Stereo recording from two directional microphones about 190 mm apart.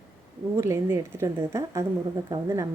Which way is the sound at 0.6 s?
15° right (ahead or behind).